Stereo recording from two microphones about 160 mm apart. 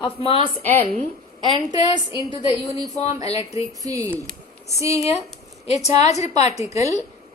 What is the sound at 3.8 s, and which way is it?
A woman's voice, 20° right (ahead or behind).